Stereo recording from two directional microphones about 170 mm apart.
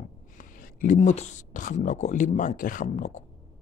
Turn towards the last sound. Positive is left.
turn(degrees=50)  # may be behind; listen again after turning